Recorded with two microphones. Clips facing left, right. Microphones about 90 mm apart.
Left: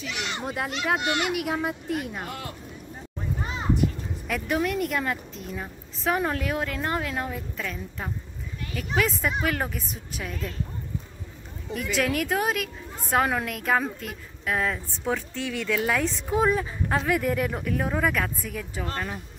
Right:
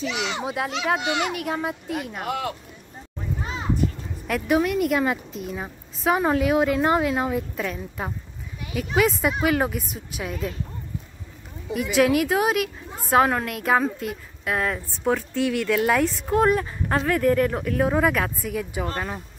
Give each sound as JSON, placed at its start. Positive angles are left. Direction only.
{"t": 0.5, "sound": "a woman's voice", "side_deg": 0}
{"t": 2.2, "sound": "speech", "side_deg": -90}
{"t": 4.3, "sound": "a woman's voice", "side_deg": -5}
{"t": 11.7, "sound": "a woman's voice", "side_deg": -5}
{"t": 16.3, "sound": "a woman's voice", "side_deg": 0}
{"t": 18.9, "sound": "speech", "side_deg": -20}